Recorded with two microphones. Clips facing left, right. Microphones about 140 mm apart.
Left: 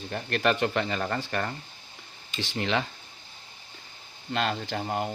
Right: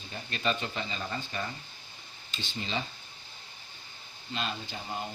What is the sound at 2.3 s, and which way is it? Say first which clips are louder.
Speech: left 7 dB; 75° left (ahead or behind).